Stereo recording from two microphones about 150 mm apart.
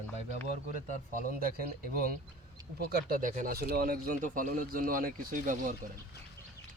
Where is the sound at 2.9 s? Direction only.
75° right (ahead or behind).